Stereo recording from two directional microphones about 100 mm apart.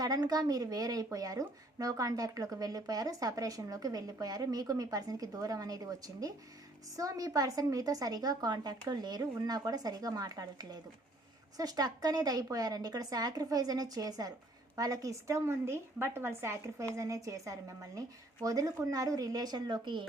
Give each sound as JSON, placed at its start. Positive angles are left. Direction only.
{"t": 0.0, "sound": "a woman's voice", "side_deg": -40}